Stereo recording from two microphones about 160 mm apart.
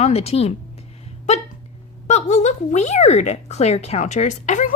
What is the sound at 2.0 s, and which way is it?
A woman's voice, 45° left (ahead or behind).